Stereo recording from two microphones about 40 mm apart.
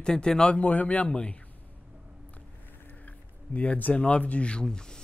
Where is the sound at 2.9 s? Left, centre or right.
Left.